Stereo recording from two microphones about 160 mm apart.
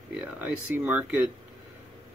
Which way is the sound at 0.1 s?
10° right (ahead or behind).